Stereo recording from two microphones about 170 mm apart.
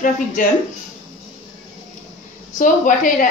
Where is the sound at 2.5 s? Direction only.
50° left (ahead or behind).